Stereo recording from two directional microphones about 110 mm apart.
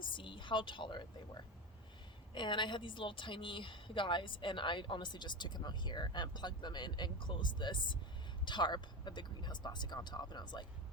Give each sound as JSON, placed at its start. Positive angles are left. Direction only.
{"t": 0.0, "sound": "a woman's voice", "side_deg": 45}